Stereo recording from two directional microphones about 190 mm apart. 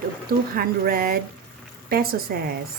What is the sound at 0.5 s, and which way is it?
A woman's voice, 55° right (ahead or behind).